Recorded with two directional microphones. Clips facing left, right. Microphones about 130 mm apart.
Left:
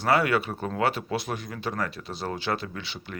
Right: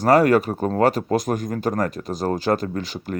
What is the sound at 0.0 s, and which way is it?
Speech, 40° right (ahead or behind).